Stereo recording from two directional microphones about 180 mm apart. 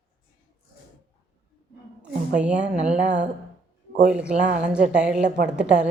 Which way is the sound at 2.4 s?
5° right (ahead or behind).